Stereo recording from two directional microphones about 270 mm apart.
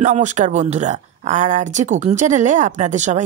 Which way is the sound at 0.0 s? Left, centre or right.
Right.